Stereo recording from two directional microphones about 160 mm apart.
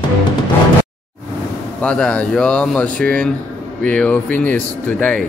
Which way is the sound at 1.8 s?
5° left (ahead or behind).